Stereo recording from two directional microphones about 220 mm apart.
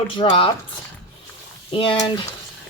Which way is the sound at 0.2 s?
20° left (ahead or behind).